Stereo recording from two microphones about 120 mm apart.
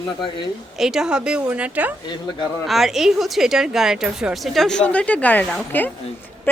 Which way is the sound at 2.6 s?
Centre (ahead or behind).